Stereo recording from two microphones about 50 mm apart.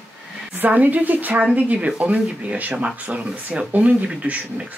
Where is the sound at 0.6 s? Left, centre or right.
Right.